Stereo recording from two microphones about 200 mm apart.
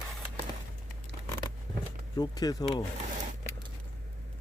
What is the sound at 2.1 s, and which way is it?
Speech, 20° left (ahead or behind).